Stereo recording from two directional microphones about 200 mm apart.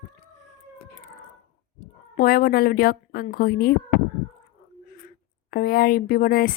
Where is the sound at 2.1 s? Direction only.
50° left (ahead or behind).